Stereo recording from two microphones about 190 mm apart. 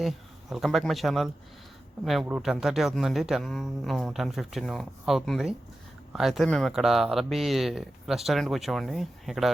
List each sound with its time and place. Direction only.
0.5 s speech: centre (ahead or behind)